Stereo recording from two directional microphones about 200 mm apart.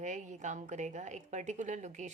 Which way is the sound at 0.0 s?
35° right (ahead or behind).